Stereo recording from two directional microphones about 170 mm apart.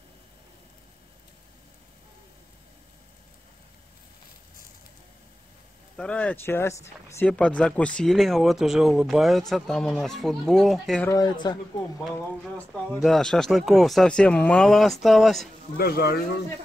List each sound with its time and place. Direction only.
5.9 s speech: 5° left (ahead or behind)
11.1 s speech: 25° left (ahead or behind)
12.5 s speech: 5° left (ahead or behind)
15.8 s speech: 65° left (ahead or behind)